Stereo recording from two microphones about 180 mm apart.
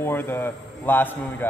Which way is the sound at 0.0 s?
10° left (ahead or behind).